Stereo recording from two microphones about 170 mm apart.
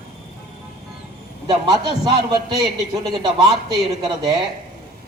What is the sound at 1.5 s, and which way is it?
Speech, 25° right (ahead or behind).